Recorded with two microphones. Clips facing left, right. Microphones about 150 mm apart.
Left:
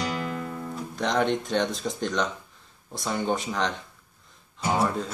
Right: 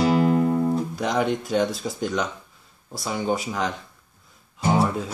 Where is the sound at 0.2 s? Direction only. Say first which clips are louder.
Right 12 dB; 40° right (ahead or behind).